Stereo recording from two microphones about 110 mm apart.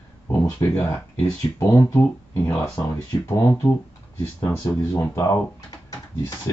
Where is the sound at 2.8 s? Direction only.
30° left (ahead or behind).